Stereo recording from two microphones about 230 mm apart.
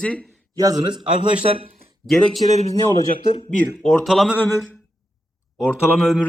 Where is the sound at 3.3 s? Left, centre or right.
Left.